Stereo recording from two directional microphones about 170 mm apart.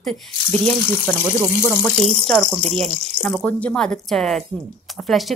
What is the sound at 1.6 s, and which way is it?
Speech, 5° left (ahead or behind).